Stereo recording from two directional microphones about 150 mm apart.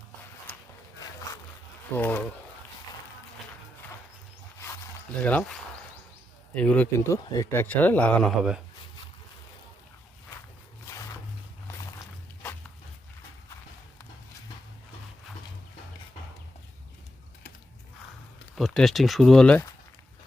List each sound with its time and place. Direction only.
1.9 s speech: 10° left (ahead or behind)
5.2 s speech: 5° left (ahead or behind)
10.8 s a sound: 20° left (ahead or behind)
11.9 s walk: 20° left (ahead or behind)
18.5 s speech: centre (ahead or behind)